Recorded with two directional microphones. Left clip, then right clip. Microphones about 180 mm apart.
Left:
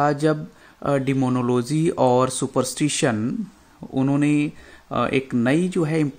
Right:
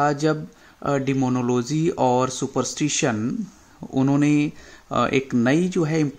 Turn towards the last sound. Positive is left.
turn(degrees=5)  # may be behind; listen again after turning